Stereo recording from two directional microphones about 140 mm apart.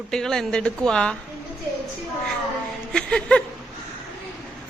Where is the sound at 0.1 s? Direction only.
5° left (ahead or behind).